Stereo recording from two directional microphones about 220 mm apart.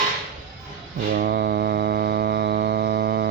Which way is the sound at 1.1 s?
45° right (ahead or behind).